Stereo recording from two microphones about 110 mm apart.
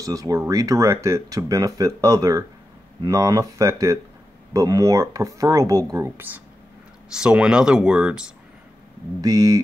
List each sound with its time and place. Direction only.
0.0 s speech: 30° right (ahead or behind)
7.2 s speech: 5° right (ahead or behind)
9.2 s speech: 35° right (ahead or behind)